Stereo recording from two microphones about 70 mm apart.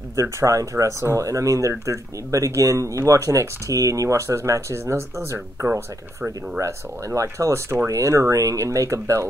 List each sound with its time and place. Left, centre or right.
0.1 s speech: right
7.2 s speech: right